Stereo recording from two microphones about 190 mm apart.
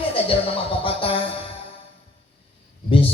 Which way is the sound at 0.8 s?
30° left (ahead or behind).